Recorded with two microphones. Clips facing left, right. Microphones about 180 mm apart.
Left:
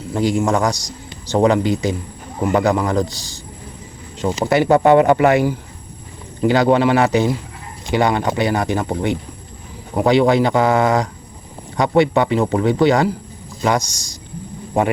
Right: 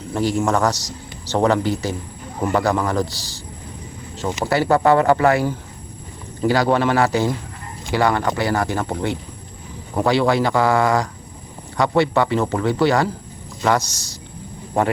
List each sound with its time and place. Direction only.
0.1 s a man's voice: 15° left (ahead or behind)
4.4 s a man's voice: 20° left (ahead or behind)